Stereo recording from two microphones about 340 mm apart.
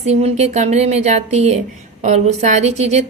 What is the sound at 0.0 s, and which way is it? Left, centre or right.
A woman's voice, centre.